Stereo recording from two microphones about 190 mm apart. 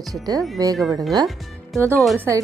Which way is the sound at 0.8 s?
Centre (ahead or behind).